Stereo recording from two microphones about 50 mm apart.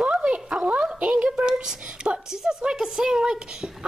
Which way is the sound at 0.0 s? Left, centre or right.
Centre.